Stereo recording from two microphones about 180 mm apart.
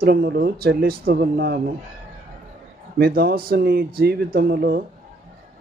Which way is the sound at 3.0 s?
60° right (ahead or behind).